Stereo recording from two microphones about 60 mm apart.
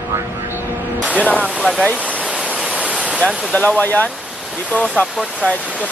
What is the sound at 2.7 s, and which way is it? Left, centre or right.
Waterfall, centre.